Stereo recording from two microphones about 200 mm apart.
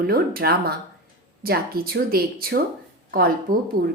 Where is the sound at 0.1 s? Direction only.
50° right (ahead or behind).